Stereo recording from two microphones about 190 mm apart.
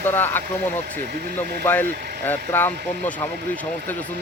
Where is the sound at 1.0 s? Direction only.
60° right (ahead or behind).